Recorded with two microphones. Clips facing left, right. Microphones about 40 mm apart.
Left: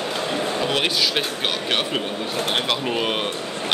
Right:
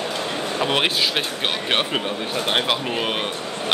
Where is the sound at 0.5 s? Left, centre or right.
Right.